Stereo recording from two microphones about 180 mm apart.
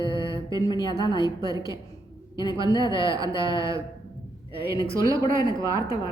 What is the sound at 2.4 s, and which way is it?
Speech, 25° left (ahead or behind).